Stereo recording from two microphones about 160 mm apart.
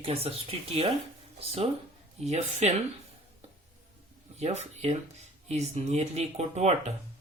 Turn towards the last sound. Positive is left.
turn(degrees=-45)  # may be behind; listen again after turning